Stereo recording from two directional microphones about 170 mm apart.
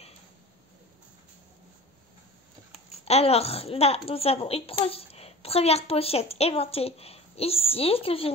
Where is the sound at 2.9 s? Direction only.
40° left (ahead or behind).